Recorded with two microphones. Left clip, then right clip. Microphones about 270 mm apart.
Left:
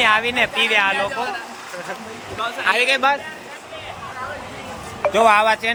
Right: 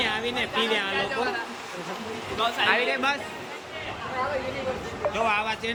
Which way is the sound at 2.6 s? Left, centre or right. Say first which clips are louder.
Left 8 dB; left.